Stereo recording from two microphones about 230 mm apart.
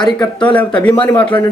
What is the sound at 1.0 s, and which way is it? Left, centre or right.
Speech, left.